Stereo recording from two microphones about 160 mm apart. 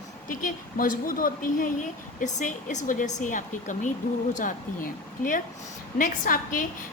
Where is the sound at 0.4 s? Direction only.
60° left (ahead or behind).